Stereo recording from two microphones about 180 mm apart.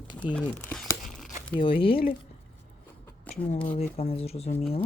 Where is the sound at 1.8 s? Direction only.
30° left (ahead or behind).